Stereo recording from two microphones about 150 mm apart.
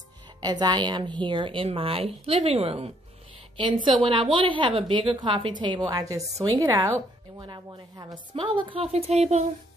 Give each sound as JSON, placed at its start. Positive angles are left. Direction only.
{"t": 0.4, "sound": "a woman's voice", "side_deg": -30}